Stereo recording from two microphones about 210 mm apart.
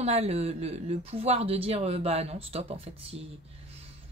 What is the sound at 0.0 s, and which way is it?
Speech, 30° right (ahead or behind).